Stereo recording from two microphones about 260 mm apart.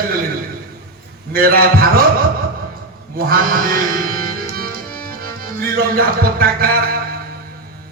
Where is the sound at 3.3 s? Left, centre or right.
Right.